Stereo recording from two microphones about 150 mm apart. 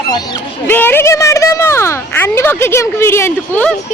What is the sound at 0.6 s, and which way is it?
A woman's voice, 15° left (ahead or behind).